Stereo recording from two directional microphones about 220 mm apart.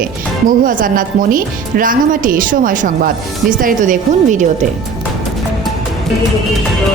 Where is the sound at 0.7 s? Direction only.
40° right (ahead or behind).